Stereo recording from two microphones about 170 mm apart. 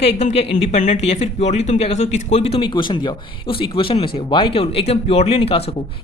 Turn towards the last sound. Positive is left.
turn(degrees=35)  # may be behind; listen again after turning